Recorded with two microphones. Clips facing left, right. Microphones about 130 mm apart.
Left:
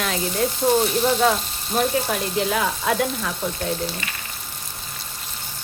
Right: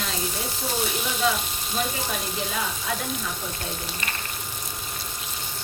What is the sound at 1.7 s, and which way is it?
Speech, 60° left (ahead or behind).